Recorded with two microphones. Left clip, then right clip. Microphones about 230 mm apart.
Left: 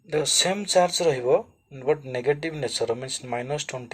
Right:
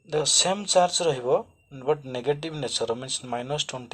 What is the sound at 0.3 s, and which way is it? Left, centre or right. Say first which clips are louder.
Speech: even; left.